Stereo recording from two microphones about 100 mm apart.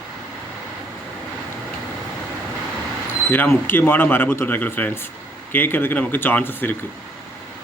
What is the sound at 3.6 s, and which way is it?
Speech, 20° left (ahead or behind).